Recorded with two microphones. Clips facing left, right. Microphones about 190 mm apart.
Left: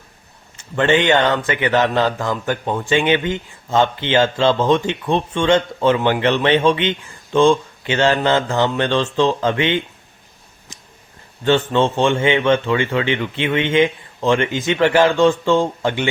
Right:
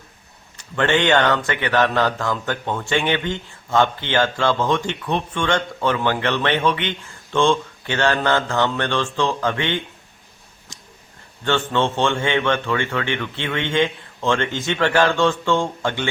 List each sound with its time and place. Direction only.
0.5 s a man's voice: 20° left (ahead or behind)
11.7 s speech: 15° left (ahead or behind)